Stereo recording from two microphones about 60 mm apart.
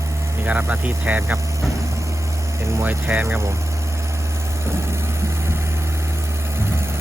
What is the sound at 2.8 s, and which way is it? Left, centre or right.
Speech, right.